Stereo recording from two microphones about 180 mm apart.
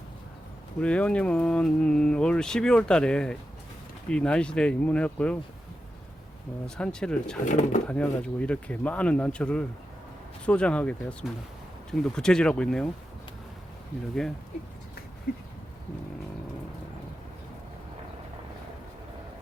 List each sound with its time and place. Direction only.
0.8 s speech: 5° left (ahead or behind)
6.7 s speech: 5° left (ahead or behind)
7.4 s speech: 45° left (ahead or behind)
7.9 s speech: 5° left (ahead or behind)